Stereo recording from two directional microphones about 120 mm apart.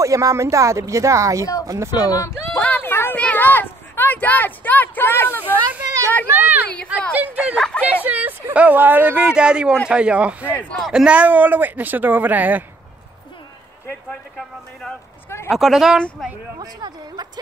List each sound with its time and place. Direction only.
0.0 s speech: 25° right (ahead or behind)
1.4 s speech: 30° left (ahead or behind)
1.7 s speech: 25° right (ahead or behind)
2.0 s speech: 25° left (ahead or behind)
2.6 s a sound: 15° left (ahead or behind)
5.4 s children playing: 15° right (ahead or behind)
6.2 s speech: 15° right (ahead or behind)
7.5 s a sound: 5° left (ahead or behind)
7.8 s speech: 10° right (ahead or behind)
10.5 s a man's voice: 10° left (ahead or behind)
10.8 s speech: 5° right (ahead or behind)
15.2 s a sound: 20° left (ahead or behind)
15.5 s speech: centre (ahead or behind)
16.5 s speech: 35° right (ahead or behind)